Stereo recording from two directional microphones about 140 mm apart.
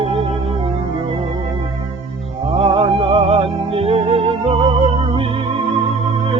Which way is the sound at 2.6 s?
40° right (ahead or behind).